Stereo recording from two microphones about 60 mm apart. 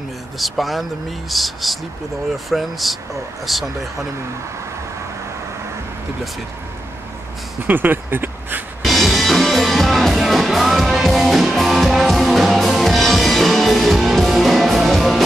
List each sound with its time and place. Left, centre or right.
0.4 s speech: centre
7.6 s speech: right
8.8 s music: centre